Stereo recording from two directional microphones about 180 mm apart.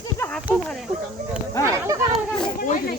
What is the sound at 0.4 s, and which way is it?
Speech, 5° right (ahead or behind).